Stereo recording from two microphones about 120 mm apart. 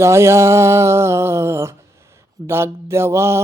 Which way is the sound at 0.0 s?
20° right (ahead or behind).